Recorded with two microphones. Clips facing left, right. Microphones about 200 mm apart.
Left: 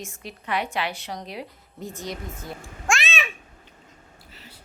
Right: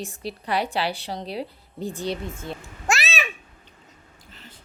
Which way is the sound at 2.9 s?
5° right (ahead or behind).